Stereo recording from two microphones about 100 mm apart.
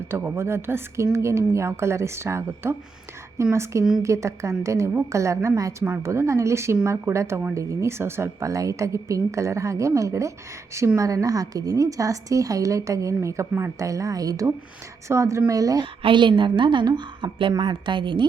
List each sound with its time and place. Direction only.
0.1 s a woman's voice: 20° right (ahead or behind)
15.8 s a woman's voice: 50° right (ahead or behind)